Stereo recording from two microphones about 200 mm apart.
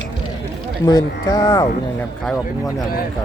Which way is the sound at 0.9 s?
20° left (ahead or behind).